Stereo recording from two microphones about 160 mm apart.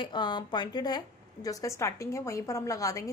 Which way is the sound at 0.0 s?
30° left (ahead or behind).